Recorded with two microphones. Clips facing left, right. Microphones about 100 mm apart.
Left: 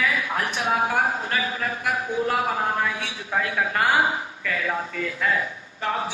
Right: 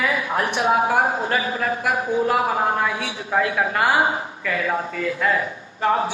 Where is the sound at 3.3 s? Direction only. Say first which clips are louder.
Right 5 dB; 30° right (ahead or behind).